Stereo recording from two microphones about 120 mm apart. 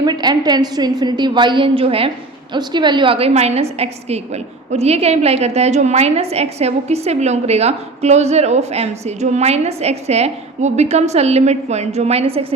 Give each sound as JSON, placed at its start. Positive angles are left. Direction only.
{"t": 0.0, "sound": "a woman's voice", "side_deg": -35}
{"t": 2.5, "sound": "a woman's voice", "side_deg": -40}